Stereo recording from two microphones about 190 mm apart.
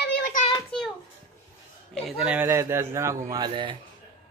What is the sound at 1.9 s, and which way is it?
A man's voice, 10° right (ahead or behind).